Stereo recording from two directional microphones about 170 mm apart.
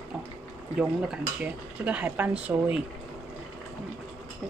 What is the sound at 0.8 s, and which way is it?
Speech, 5° right (ahead or behind).